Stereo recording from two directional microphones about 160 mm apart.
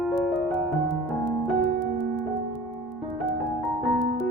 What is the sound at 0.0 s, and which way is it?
Music, centre (ahead or behind).